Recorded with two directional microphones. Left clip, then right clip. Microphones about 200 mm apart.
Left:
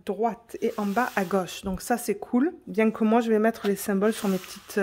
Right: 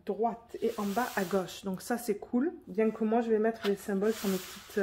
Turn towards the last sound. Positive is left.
turn(degrees=50)  # may be behind; listen again after turning